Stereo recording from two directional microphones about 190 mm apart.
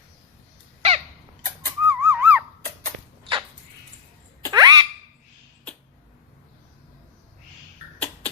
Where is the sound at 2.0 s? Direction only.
10° right (ahead or behind).